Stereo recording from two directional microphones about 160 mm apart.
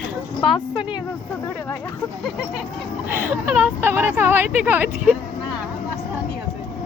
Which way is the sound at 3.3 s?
10° right (ahead or behind).